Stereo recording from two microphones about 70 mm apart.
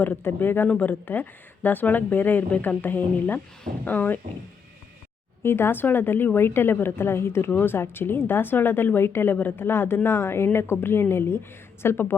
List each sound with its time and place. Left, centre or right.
0.0 s speech: left
5.4 s a woman's voice: left